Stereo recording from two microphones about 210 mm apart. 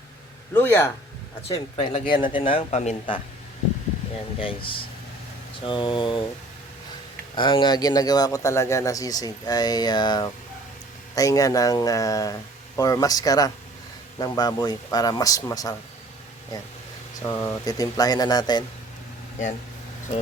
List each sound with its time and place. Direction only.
0.5 s a man's voice: 10° left (ahead or behind)
1.5 s speech: 25° left (ahead or behind)
4.4 s speech: 25° left (ahead or behind)
7.3 s a man's voice: 20° left (ahead or behind)
17.2 s a man's voice: 10° left (ahead or behind)